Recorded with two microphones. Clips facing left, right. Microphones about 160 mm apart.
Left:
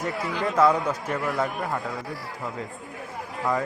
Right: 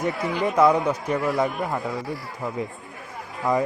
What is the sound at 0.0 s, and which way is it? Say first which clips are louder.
Speech: right 3 dB; 15° right (ahead or behind).